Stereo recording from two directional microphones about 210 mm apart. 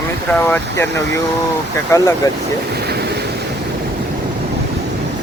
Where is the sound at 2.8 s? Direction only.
50° right (ahead or behind).